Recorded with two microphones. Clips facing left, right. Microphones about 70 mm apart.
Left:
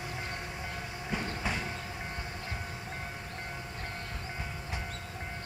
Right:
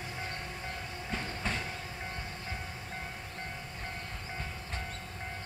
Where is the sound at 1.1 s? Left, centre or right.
Centre.